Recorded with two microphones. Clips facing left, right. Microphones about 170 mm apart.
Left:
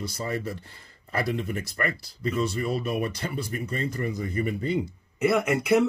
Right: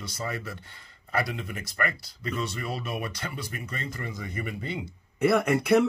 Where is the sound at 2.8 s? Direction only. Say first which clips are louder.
Left 5 dB; 45° left (ahead or behind).